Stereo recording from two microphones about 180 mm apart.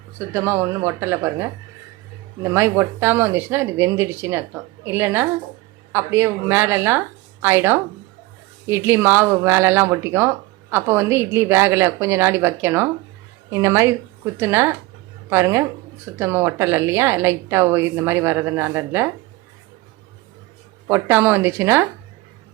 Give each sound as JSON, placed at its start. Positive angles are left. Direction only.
{"t": 0.2, "sound": "speech", "side_deg": -15}
{"t": 20.8, "sound": "speech", "side_deg": -10}